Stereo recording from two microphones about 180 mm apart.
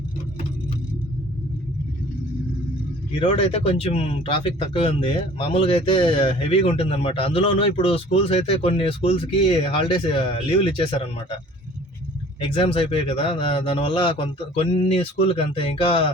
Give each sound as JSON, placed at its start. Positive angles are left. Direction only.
{"t": 3.2, "sound": "speech", "side_deg": 30}
{"t": 12.4, "sound": "speech", "side_deg": 30}